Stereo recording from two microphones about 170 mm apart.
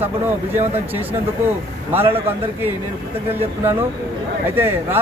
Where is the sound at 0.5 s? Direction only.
10° right (ahead or behind).